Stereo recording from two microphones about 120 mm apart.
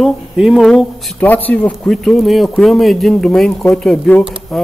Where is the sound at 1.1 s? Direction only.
15° left (ahead or behind).